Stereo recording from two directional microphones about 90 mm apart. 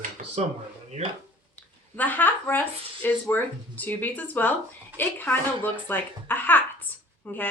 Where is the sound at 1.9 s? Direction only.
20° left (ahead or behind).